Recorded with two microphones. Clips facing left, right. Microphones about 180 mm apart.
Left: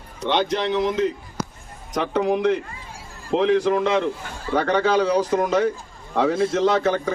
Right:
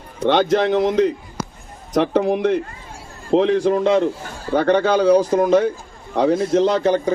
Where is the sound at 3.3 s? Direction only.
40° right (ahead or behind).